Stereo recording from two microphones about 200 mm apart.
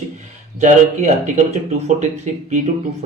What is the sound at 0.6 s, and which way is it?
Speech, 35° right (ahead or behind).